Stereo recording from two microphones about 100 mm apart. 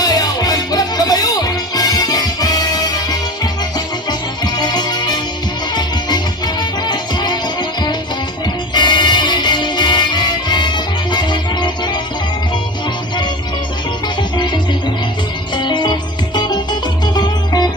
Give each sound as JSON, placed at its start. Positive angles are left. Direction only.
{"t": 0.0, "sound": "music", "side_deg": 40}
{"t": 8.7, "sound": "music", "side_deg": 50}
{"t": 14.2, "sound": "music", "side_deg": 50}